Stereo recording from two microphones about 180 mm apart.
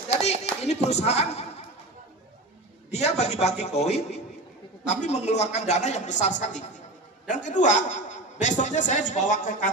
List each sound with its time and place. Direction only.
0.2 s clapping: 35° left (ahead or behind)
0.8 s speech: 35° left (ahead or behind)
2.9 s a man's voice: 35° left (ahead or behind)